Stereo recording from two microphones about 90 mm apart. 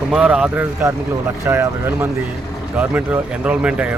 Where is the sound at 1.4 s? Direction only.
30° right (ahead or behind).